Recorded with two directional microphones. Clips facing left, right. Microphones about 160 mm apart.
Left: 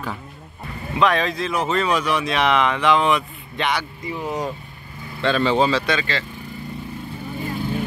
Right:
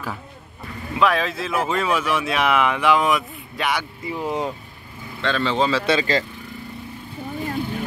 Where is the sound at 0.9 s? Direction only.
5° right (ahead or behind).